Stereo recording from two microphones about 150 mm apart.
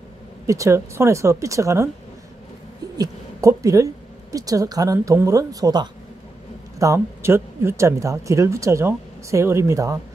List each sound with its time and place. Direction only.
0.5 s speech: 20° right (ahead or behind)
3.0 s a woman's voice: 20° right (ahead or behind)